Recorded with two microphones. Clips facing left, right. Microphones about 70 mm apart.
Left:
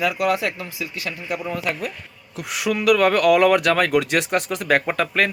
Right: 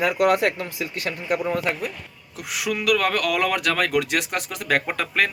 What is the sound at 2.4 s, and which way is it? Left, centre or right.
Speech, centre.